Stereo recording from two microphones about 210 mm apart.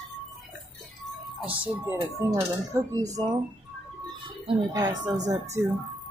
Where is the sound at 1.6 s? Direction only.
15° right (ahead or behind).